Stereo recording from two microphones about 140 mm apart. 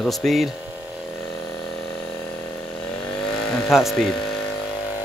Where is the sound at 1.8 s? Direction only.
5° left (ahead or behind).